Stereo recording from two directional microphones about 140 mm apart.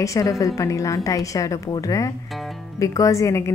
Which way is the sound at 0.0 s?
25° left (ahead or behind).